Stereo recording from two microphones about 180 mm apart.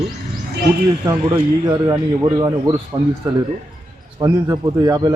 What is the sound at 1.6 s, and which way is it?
Speech, 25° right (ahead or behind).